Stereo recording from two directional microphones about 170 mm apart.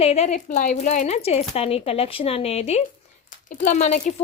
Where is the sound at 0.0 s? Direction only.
40° left (ahead or behind).